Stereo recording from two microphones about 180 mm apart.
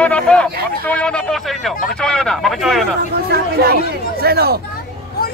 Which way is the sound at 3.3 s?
60° right (ahead or behind).